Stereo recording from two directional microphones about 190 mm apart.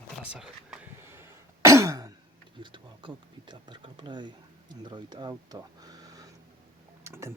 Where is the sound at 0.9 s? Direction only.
15° right (ahead or behind).